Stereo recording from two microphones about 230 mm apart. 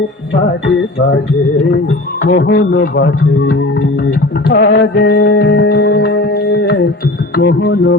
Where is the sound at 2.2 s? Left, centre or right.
Left.